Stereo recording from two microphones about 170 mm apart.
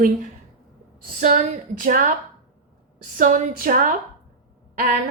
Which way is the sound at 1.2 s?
50° right (ahead or behind).